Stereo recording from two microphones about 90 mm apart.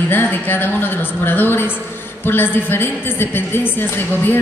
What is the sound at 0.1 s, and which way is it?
A woman's voice, 20° left (ahead or behind).